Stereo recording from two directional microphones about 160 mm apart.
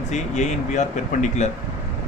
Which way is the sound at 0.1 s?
45° left (ahead or behind).